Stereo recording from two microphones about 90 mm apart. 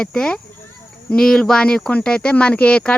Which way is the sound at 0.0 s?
10° left (ahead or behind).